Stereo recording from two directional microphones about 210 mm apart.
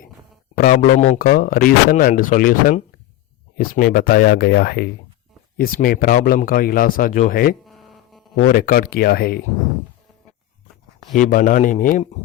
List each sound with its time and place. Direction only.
0.5 s speech: 45° left (ahead or behind)
7.6 s hum: centre (ahead or behind)
8.4 s speech: 40° left (ahead or behind)
11.2 s speech: 40° left (ahead or behind)